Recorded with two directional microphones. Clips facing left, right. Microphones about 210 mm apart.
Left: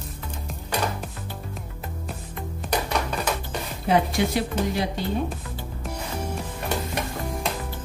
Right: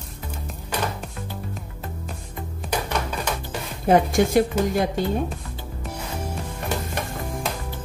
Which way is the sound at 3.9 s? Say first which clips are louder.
Right 4 dB; 45° right (ahead or behind).